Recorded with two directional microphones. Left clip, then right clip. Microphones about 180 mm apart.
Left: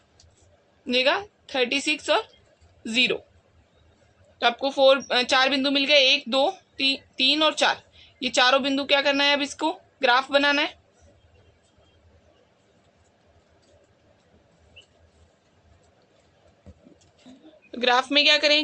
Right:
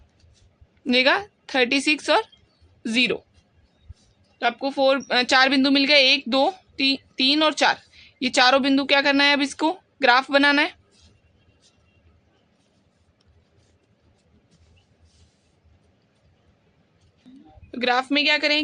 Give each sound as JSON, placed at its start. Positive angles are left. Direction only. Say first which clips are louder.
{"t": 0.9, "sound": "speech", "louder": "right 3 dB", "side_deg": -35}
{"t": 4.4, "sound": "speech", "louder": "left 1 dB", "side_deg": -15}
{"t": 17.7, "sound": "a woman's voice", "louder": "even", "side_deg": -25}